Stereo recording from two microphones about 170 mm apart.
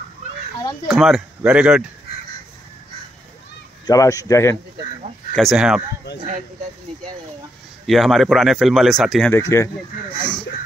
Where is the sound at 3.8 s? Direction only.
20° left (ahead or behind).